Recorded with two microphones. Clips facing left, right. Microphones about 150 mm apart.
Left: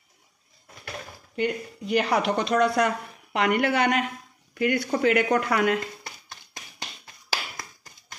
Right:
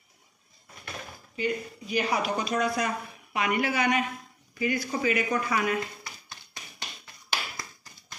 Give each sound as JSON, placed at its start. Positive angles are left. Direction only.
{"t": 1.3, "sound": "speech", "side_deg": 70}